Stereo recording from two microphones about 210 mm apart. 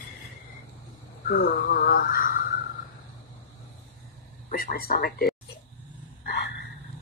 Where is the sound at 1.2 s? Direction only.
45° left (ahead or behind).